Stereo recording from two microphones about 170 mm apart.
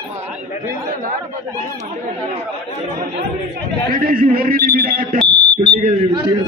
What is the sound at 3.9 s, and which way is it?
A man's voice, 55° right (ahead or behind).